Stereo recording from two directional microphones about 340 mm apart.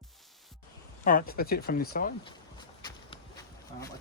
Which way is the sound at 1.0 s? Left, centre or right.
Left.